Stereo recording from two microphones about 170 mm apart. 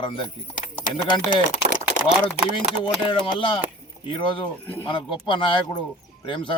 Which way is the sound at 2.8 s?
30° left (ahead or behind).